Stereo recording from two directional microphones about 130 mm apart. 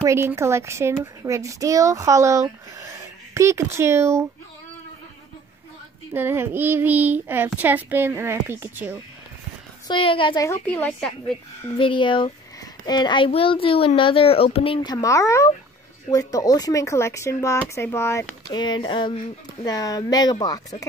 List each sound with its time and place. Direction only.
0.0 s a woman's voice: 20° right (ahead or behind)
6.1 s speech: 15° right (ahead or behind)
9.8 s speech: 40° left (ahead or behind)
10.7 s a woman's voice: 10° left (ahead or behind)
11.8 s a child's voice: 40° left (ahead or behind)
14.9 s speech: 25° left (ahead or behind)
18.5 s speech: 35° left (ahead or behind)